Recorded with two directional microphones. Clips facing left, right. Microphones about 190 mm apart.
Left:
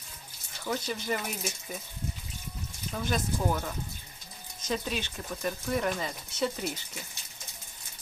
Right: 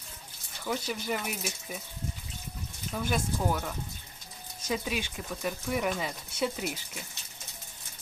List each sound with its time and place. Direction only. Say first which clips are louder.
0.6 s speech: even; centre (ahead or behind)
2.9 s speech: even; 5° right (ahead or behind)